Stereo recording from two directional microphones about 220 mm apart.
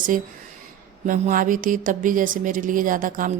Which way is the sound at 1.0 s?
35° right (ahead or behind).